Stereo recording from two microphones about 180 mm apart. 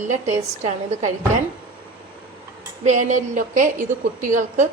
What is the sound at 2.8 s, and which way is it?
A woman's voice, 45° right (ahead or behind).